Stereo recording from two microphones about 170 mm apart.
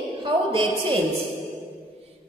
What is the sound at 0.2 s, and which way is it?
Speech, 30° right (ahead or behind).